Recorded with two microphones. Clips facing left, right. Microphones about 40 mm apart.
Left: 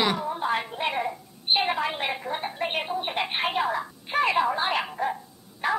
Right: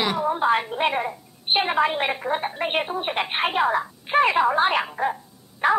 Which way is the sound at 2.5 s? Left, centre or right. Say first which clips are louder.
Right 3 dB; right.